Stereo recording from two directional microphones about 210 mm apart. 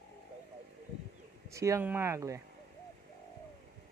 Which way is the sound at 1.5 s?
15° right (ahead or behind).